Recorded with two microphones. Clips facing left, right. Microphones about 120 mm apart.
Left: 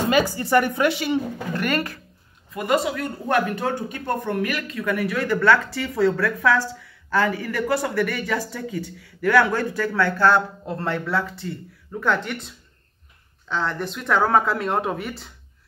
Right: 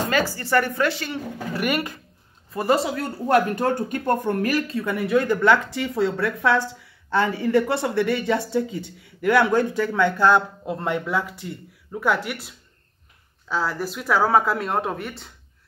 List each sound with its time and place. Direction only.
0.1 s speech: 15° left (ahead or behind)
1.5 s speech: 10° right (ahead or behind)
2.5 s speech: 30° right (ahead or behind); by 15.3 s centre (ahead or behind)